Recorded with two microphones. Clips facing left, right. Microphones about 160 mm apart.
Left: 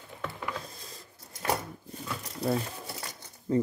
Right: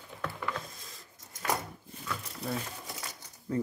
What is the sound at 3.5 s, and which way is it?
Speech, 25° left (ahead or behind).